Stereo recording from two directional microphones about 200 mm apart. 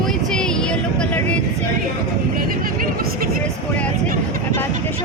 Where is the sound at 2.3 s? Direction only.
45° right (ahead or behind).